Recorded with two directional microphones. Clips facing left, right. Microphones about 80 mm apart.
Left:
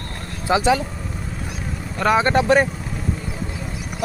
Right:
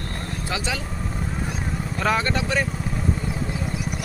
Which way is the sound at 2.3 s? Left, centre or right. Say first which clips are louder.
Left 8 dB; left.